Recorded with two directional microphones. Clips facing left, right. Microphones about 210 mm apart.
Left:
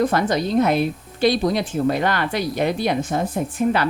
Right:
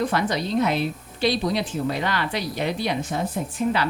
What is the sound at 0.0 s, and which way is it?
A woman's voice, 45° left (ahead or behind).